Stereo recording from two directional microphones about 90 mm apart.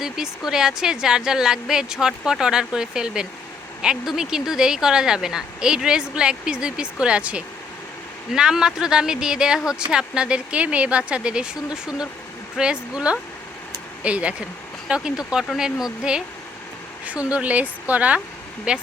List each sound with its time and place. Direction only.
0.0 s speech: 5° right (ahead or behind)